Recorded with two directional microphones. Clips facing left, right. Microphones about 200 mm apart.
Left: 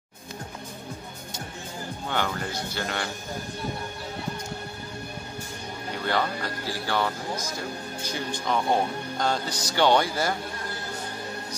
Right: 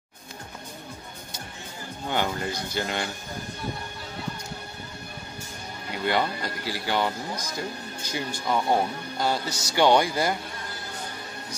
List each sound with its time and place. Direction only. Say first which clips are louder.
2.0 s speech: right 2 dB; 15° right (ahead or behind)
6.0 s speech: right 2 dB; 15° right (ahead or behind)
8.1 s speech: right 1 dB; 10° right (ahead or behind)